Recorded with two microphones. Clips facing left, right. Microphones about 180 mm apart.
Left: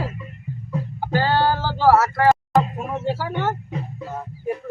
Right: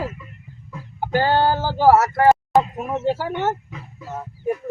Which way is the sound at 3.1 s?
20° right (ahead or behind).